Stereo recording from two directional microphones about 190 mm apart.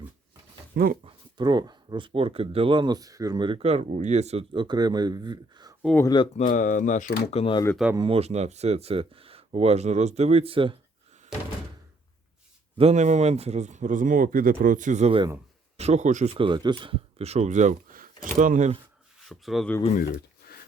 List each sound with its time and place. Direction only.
1.0 s speech: 25° right (ahead or behind)
6.0 s speech: 20° left (ahead or behind)
6.3 s speech: 45° left (ahead or behind)
7.9 s speech: 30° right (ahead or behind)
12.7 s speech: 35° right (ahead or behind)
19.3 s speech: centre (ahead or behind)
20.0 s a sound: 55° left (ahead or behind)